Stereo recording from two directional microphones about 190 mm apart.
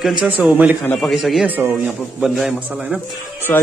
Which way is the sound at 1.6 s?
10° right (ahead or behind).